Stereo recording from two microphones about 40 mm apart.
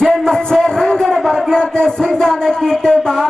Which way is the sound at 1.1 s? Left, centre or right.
Centre.